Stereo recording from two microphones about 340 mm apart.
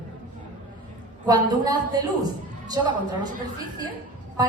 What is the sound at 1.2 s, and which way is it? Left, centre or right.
Speech, centre.